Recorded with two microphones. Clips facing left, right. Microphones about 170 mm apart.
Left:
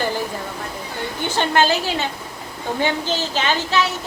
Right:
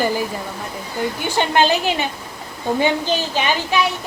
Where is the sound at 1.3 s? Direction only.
15° right (ahead or behind).